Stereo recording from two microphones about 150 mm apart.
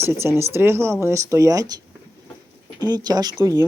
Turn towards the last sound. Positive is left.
turn(degrees=-25)  # may be behind; listen again after turning